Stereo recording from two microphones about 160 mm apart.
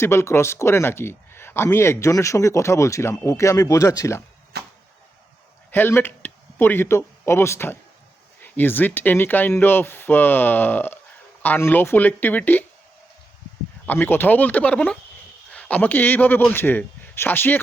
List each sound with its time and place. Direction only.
0.0 s speech: 15° left (ahead or behind)
4.5 s a sound: 90° right
5.7 s speech: 10° left (ahead or behind)
13.8 s a man's voice: 10° left (ahead or behind)